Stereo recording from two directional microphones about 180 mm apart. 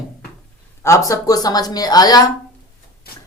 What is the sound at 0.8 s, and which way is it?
A woman's voice, 15° left (ahead or behind).